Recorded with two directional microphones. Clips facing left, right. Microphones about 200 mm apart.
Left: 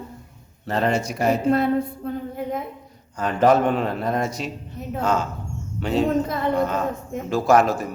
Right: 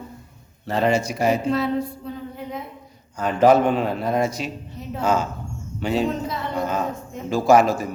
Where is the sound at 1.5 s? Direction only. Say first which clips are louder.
Left 3 dB; 55° left (ahead or behind).